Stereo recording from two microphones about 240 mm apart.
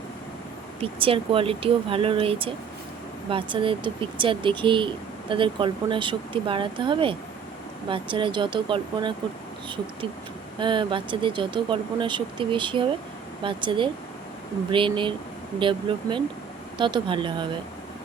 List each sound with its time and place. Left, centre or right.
0.8 s speech: right
10.6 s speech: centre